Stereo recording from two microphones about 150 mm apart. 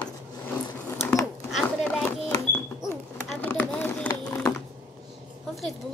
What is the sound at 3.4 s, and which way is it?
Run, 10° left (ahead or behind).